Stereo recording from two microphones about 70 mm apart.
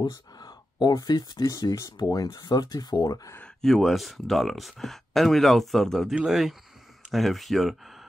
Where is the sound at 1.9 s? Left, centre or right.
Left.